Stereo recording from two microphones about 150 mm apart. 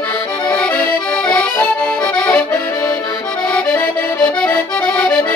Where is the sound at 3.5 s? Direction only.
5° left (ahead or behind).